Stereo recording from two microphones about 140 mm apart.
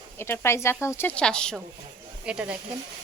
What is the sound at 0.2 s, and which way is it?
Speech, 20° left (ahead or behind).